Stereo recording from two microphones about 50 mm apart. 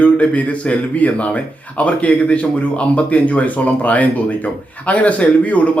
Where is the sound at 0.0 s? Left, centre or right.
Left.